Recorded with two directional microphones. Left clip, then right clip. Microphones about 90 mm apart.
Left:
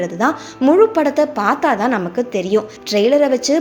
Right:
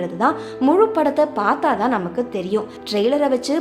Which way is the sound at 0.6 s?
10° left (ahead or behind).